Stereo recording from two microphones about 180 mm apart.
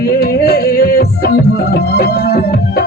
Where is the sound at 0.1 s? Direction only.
60° left (ahead or behind).